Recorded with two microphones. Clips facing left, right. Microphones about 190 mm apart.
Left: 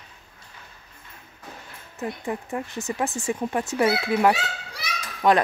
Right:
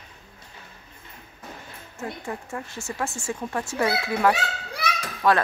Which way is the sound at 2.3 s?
20° left (ahead or behind).